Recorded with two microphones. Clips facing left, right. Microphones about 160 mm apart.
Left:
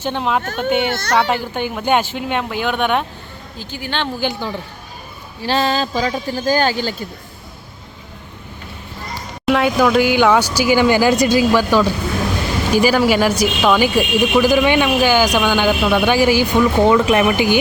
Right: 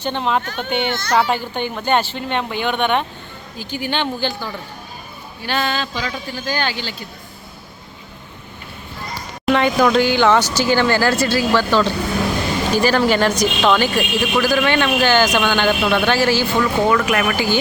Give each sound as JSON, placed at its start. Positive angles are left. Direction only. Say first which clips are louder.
{"t": 0.0, "sound": "speech", "louder": "left 1 dB", "side_deg": 5}
{"t": 0.4, "sound": "a child's voice", "louder": "left 5 dB", "side_deg": 45}
{"t": 1.2, "sound": "speech", "louder": "left 1 dB", "side_deg": 5}
{"t": 3.6, "sound": "a woman's voice", "louder": "right 2 dB", "side_deg": -15}
{"t": 4.2, "sound": "a man's voice", "louder": "left 2 dB", "side_deg": 20}
{"t": 5.4, "sound": "speech", "louder": "left 4 dB", "side_deg": 30}
{"t": 9.5, "sound": "a woman's voice", "louder": "left 1 dB", "side_deg": 5}